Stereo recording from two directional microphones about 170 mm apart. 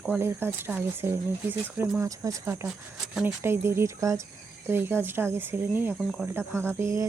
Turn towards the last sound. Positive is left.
turn(degrees=-15)  # may be behind; listen again after turning